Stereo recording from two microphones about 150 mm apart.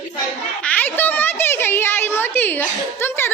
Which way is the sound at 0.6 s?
10° left (ahead or behind).